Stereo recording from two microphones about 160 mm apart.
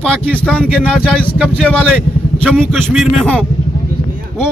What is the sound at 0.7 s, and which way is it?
Speech, 5° right (ahead or behind).